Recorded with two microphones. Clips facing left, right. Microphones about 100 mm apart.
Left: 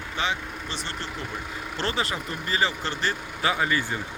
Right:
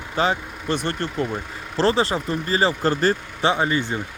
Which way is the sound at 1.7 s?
35° right (ahead or behind).